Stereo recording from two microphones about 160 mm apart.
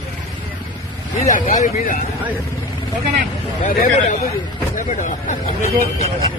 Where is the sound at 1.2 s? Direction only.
50° left (ahead or behind).